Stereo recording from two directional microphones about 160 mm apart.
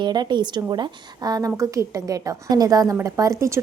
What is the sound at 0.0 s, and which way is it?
A woman's voice, 30° right (ahead or behind).